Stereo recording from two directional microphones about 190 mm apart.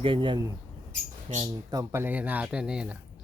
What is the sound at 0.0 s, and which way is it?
Speech, 25° right (ahead or behind).